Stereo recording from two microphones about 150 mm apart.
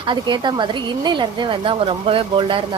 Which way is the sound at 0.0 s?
30° right (ahead or behind).